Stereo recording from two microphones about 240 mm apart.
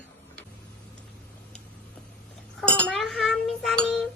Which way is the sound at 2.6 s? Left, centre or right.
Centre.